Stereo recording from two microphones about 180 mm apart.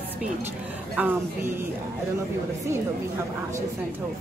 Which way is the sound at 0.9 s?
10° right (ahead or behind).